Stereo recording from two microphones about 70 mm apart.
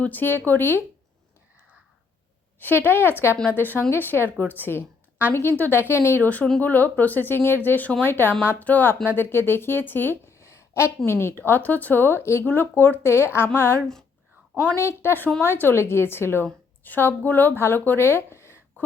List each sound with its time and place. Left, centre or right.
0.0 s a woman's voice: left
2.6 s a woman's voice: left
6.2 s a woman's voice: left
14.8 s a woman's voice: left